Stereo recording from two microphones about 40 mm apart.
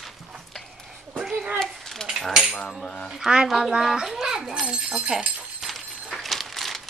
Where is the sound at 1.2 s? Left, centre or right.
Centre.